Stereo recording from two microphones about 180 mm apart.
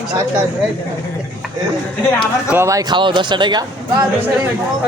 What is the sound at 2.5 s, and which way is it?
Speech, 15° right (ahead or behind).